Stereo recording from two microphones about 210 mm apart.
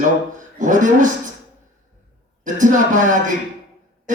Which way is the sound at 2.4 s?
35° right (ahead or behind).